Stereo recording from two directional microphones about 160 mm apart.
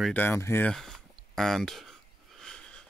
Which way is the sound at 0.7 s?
Centre (ahead or behind).